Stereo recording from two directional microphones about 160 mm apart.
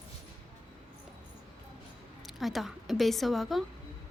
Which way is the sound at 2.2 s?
Centre (ahead or behind).